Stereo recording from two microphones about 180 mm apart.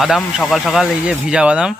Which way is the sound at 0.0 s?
Centre (ahead or behind).